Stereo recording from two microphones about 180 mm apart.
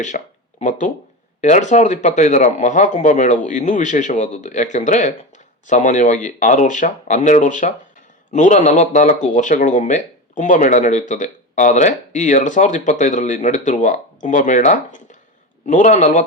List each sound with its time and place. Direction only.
0.1 s speech: 45° left (ahead or behind)